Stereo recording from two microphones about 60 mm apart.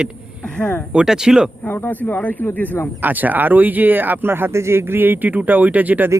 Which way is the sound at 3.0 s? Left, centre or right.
Right.